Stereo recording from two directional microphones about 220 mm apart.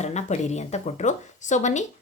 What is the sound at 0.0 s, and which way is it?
A woman's voice, 30° left (ahead or behind).